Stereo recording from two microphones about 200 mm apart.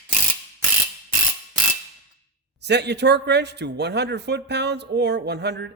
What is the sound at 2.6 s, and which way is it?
Speech, 55° right (ahead or behind).